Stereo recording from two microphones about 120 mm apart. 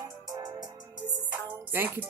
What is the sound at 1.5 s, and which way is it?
Music, 15° right (ahead or behind).